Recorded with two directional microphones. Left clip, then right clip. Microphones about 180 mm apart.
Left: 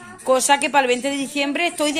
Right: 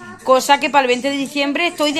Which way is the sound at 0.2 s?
15° left (ahead or behind).